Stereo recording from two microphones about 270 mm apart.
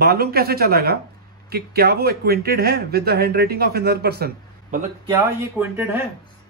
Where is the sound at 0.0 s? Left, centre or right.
Right.